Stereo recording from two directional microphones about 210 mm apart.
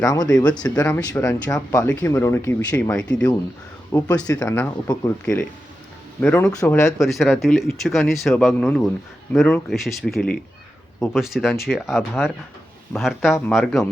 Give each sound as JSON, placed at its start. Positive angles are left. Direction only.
{"t": 0.0, "sound": "speech", "side_deg": 15}
{"t": 3.1, "sound": "speech", "side_deg": 5}
{"t": 3.9, "sound": "speech", "side_deg": 15}
{"t": 6.1, "sound": "speech", "side_deg": 10}
{"t": 7.0, "sound": "speech", "side_deg": 0}